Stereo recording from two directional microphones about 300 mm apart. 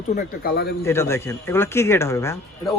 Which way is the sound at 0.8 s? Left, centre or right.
Centre.